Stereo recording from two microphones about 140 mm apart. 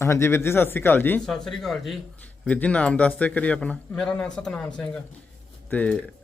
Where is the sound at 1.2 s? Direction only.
Centre (ahead or behind).